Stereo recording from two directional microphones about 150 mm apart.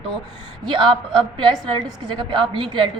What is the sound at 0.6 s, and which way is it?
A woman's voice, 30° right (ahead or behind).